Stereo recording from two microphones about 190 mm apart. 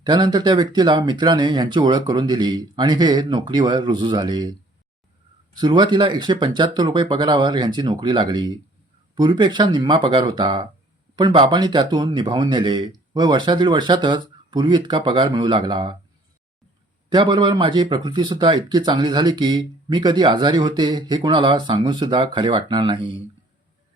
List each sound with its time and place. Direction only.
0.0 s speech: 20° right (ahead or behind)
5.5 s speech: 20° right (ahead or behind)
17.1 s speech: 25° right (ahead or behind)